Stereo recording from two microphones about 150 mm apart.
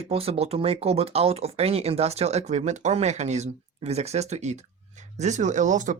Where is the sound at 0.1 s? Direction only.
40° right (ahead or behind).